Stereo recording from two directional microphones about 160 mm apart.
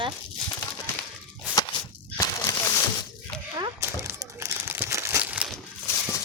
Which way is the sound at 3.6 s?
25° right (ahead or behind).